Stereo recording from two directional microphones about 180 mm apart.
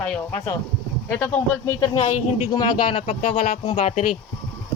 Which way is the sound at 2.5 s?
25° left (ahead or behind).